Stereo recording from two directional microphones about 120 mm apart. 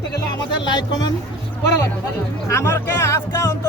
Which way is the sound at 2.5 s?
20° left (ahead or behind).